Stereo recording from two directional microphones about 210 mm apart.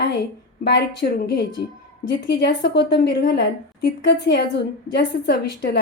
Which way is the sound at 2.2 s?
50° left (ahead or behind).